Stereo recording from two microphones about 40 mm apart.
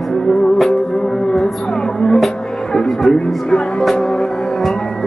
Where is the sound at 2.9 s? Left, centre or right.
Centre.